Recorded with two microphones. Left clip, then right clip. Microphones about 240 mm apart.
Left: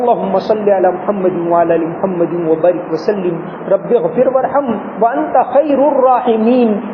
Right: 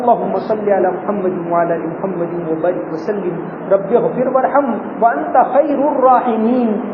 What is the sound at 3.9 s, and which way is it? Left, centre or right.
Speech, left.